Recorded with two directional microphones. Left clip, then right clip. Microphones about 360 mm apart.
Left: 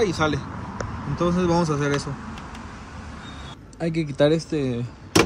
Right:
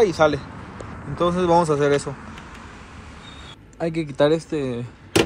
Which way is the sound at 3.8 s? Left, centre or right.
Centre.